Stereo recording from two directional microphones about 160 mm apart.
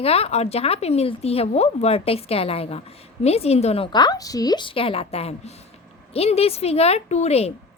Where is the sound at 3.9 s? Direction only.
25° left (ahead or behind); by 7.5 s 40° left (ahead or behind).